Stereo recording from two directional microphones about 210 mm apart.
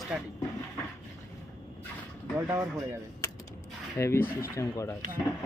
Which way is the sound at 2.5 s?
15° right (ahead or behind).